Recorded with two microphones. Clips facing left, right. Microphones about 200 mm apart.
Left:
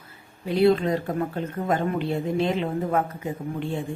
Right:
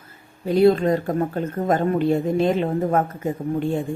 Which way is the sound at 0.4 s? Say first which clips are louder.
Right 4 dB; 45° right (ahead or behind).